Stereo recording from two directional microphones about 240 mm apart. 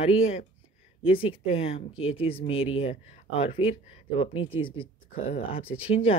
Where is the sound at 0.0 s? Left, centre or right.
Left.